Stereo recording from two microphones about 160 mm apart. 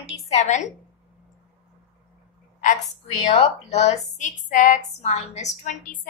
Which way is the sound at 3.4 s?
45° left (ahead or behind).